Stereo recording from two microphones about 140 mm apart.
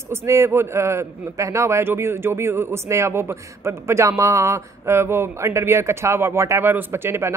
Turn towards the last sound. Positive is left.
turn(degrees=-15)  # may be behind; listen again after turning